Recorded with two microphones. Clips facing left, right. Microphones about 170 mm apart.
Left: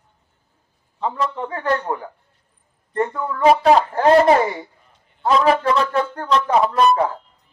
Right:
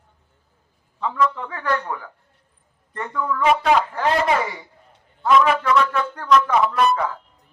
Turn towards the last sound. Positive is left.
turn(degrees=30)  # may be behind; listen again after turning